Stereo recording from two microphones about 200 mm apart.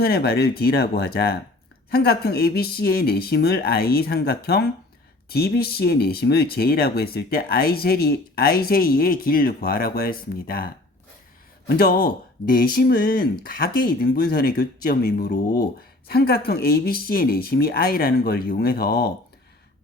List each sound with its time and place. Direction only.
0.0 s speech: 50° left (ahead or behind)
11.7 s speech: 50° left (ahead or behind)